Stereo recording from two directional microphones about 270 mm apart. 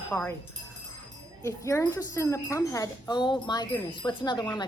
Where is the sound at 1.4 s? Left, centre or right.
Centre.